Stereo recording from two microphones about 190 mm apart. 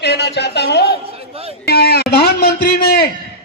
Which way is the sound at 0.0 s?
60° left (ahead or behind).